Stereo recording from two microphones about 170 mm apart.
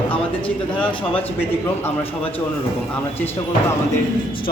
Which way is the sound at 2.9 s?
10° left (ahead or behind).